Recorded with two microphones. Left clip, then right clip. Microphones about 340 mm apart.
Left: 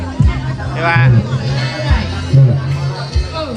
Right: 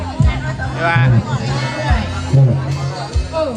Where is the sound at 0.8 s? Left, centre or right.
Centre.